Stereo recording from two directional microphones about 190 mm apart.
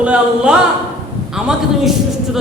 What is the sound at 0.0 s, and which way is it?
A woman's voice, 5° right (ahead or behind).